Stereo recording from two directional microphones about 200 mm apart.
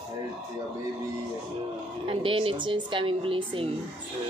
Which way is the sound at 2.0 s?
25° right (ahead or behind).